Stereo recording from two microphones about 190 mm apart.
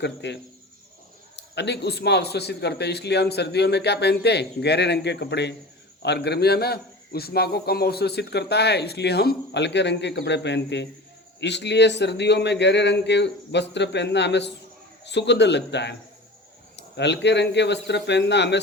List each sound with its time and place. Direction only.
0.0 s a man's voice: 65° left (ahead or behind)
1.4 s a man's voice: 65° left (ahead or behind)